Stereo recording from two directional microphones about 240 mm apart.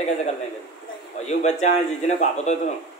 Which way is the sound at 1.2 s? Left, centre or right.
Left.